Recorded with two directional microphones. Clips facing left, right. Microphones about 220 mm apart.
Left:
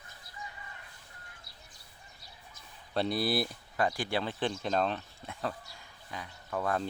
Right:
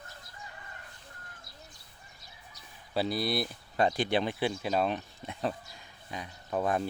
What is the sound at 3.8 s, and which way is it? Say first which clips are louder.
Speech: right 4 dB; 20° right (ahead or behind).